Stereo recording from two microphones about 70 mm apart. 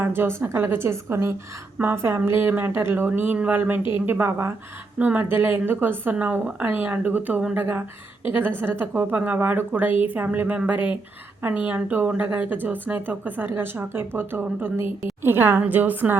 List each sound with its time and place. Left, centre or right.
0.0 s a woman's voice: right
4.9 s a woman's voice: right